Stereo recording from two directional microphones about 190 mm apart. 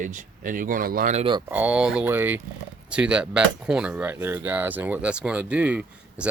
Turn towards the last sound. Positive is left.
turn(degrees=-5)  # may be behind; listen again after turning